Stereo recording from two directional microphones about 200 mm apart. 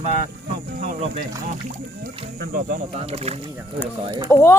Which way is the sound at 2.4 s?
45° right (ahead or behind).